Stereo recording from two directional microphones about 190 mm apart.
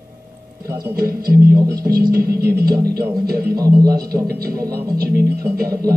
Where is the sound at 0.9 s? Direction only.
50° right (ahead or behind).